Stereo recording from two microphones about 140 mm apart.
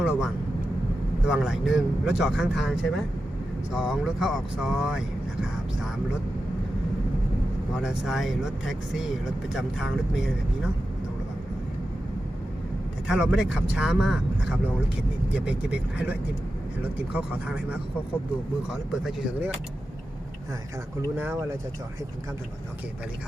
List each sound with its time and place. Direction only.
0.0 s speech: 5° right (ahead or behind)
1.3 s speech: centre (ahead or behind)
7.8 s speech: centre (ahead or behind)
13.1 s speech: 5° right (ahead or behind)
17.2 s speech: 10° right (ahead or behind)
21.2 s speech: 20° right (ahead or behind)